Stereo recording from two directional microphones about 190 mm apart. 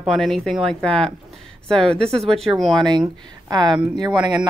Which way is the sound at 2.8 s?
20° right (ahead or behind).